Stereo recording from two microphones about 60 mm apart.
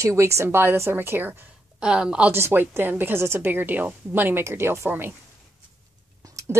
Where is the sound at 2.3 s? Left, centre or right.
Right.